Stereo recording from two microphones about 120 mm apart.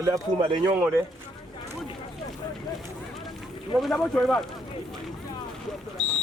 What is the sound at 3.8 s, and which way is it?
Speech, 5° left (ahead or behind).